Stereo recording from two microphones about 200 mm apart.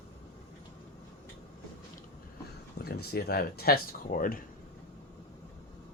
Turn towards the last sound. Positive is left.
turn(degrees=45)  # may be behind; listen again after turning